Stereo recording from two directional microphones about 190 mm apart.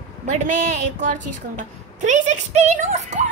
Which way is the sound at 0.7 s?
40° right (ahead or behind).